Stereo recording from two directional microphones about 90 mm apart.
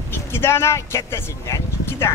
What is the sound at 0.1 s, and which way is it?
Speech, 25° left (ahead or behind).